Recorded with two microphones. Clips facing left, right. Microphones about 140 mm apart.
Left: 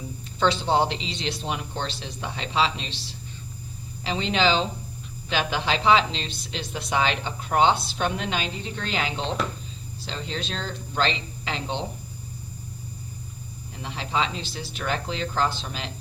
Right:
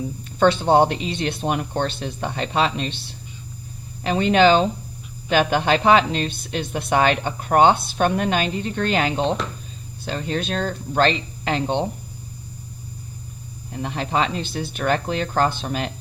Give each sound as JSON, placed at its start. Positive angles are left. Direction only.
{"t": 0.3, "sound": "a woman's voice", "side_deg": -55}
{"t": 13.7, "sound": "speech", "side_deg": -55}